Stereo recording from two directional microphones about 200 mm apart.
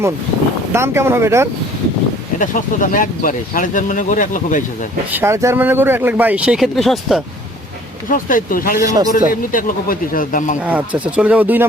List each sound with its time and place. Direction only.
0.7 s speech: 10° right (ahead or behind)
2.4 s speech: 40° left (ahead or behind)
5.1 s speech: 15° right (ahead or behind)
8.1 s speech: 45° left (ahead or behind)
8.8 s speech: 15° right (ahead or behind)
9.1 s speech: 45° left (ahead or behind)
10.7 s speech: 5° right (ahead or behind)